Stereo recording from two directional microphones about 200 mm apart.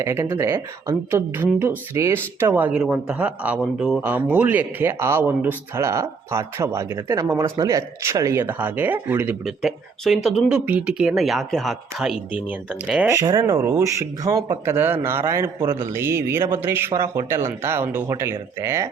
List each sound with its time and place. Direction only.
0.0 s speech: 15° right (ahead or behind)
13.1 s speech: 20° right (ahead or behind)